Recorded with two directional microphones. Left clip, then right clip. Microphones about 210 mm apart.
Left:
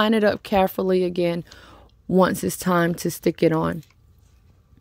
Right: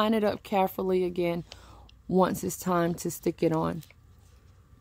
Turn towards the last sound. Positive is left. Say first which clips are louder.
# left 7 dB
turn(degrees=25)  # may be behind; listen again after turning